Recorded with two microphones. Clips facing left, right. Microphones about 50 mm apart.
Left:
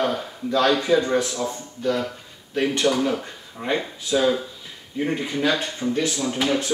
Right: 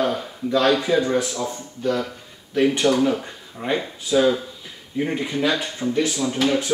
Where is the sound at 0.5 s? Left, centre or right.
Centre.